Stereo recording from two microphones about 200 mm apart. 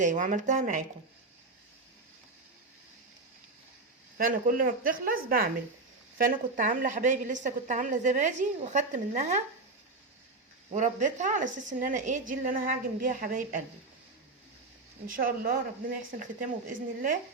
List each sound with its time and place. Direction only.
0.0 s a woman's voice: 40° right (ahead or behind)
4.2 s a woman's voice: 45° right (ahead or behind)
10.7 s a woman's voice: 35° right (ahead or behind)
15.0 s speech: 45° right (ahead or behind)